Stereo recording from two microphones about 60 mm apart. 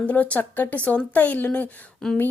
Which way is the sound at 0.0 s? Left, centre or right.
Left.